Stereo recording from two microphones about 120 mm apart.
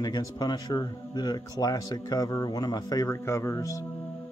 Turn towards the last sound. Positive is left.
turn(degrees=25)  # may be behind; listen again after turning